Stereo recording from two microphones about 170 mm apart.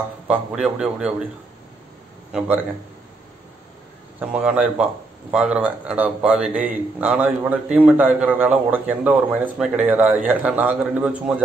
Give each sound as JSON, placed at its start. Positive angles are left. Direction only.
{"t": 0.3, "sound": "a man's voice", "side_deg": -5}
{"t": 2.3, "sound": "speech", "side_deg": -10}
{"t": 4.2, "sound": "speech", "side_deg": -5}